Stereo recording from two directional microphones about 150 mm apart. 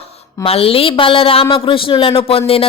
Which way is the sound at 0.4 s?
40° left (ahead or behind).